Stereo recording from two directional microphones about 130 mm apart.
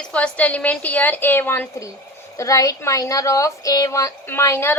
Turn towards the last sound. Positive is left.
turn(degrees=20)  # may be behind; listen again after turning